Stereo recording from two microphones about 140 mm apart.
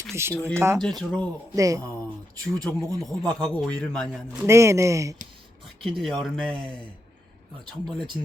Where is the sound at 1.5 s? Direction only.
25° right (ahead or behind).